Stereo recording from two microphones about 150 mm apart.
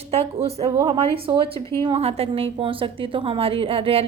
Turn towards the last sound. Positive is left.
turn(degrees=-40)  # may be behind; listen again after turning